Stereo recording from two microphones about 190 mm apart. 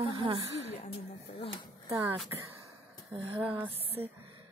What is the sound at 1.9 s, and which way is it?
Speech, 15° right (ahead or behind).